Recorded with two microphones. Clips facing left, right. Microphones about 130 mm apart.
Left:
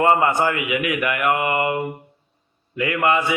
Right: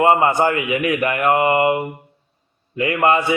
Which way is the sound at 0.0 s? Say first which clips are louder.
Right 2 dB; 25° right (ahead or behind).